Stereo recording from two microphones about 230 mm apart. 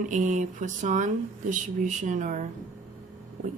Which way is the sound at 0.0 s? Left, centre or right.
Right.